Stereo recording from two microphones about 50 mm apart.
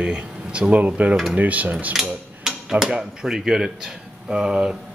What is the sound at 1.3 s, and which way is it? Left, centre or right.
Dishes, right.